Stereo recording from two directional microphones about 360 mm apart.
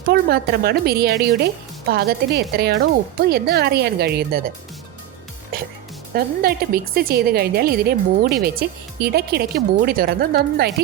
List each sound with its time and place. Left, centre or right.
0.0 s a woman's voice: right
5.5 s music: right
6.1 s a woman's voice: right